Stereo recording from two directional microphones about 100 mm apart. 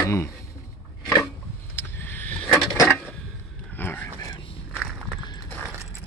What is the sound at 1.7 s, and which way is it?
Vehicle, 20° left (ahead or behind).